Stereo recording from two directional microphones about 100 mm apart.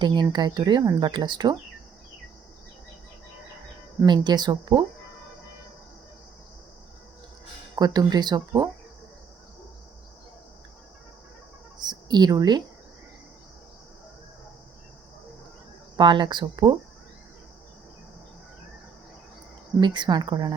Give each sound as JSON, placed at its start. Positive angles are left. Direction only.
{"t": 0.0, "sound": "speech", "side_deg": -50}
{"t": 4.0, "sound": "speech", "side_deg": -45}
{"t": 7.8, "sound": "speech", "side_deg": -40}
{"t": 11.8, "sound": "a woman's voice", "side_deg": -45}
{"t": 16.0, "sound": "speech", "side_deg": -50}
{"t": 19.8, "sound": "speech", "side_deg": -50}